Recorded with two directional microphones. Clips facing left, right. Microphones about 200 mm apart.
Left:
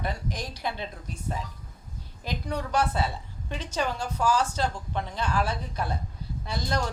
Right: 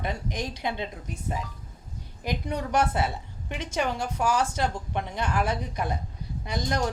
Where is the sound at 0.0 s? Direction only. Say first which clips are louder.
Right 2 dB; 20° right (ahead or behind).